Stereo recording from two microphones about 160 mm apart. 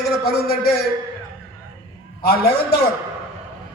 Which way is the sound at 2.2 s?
75° left (ahead or behind).